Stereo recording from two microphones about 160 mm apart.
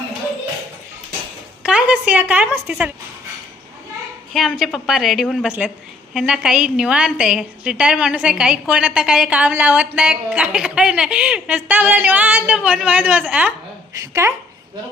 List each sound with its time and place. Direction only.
1.6 s a woman's voice: 5° right (ahead or behind)
4.4 s a woman's voice: centre (ahead or behind)
13.9 s a woman's voice: 20° right (ahead or behind)